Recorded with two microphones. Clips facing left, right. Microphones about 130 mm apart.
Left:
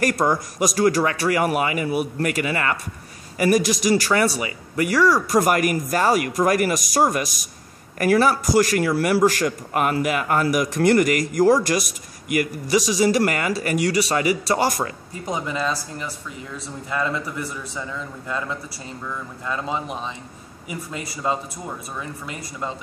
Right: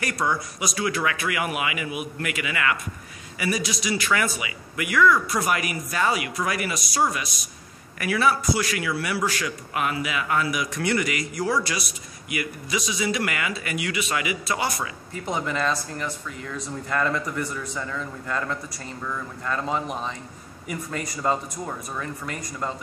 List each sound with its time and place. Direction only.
0.0 s a man's voice: 45° left (ahead or behind)
5.4 s a man's voice: 45° left (ahead or behind)
15.2 s a man's voice: 15° left (ahead or behind)
16.1 s a man's voice: 30° left (ahead or behind)
16.9 s a man's voice: 10° left (ahead or behind)
19.4 s a man's voice: 15° left (ahead or behind)
21.2 s a man's voice: 10° left (ahead or behind)